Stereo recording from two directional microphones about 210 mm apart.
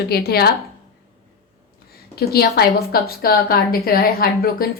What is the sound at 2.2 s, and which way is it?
A woman's voice, 50° left (ahead or behind).